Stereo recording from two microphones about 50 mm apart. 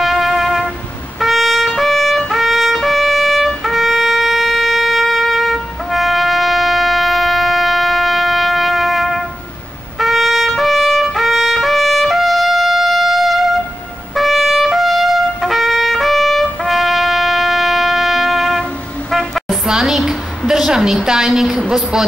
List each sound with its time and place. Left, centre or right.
0.0 s music: centre
1.2 s trumpet: centre
19.8 s a sound: centre
21.3 s a woman's voice: centre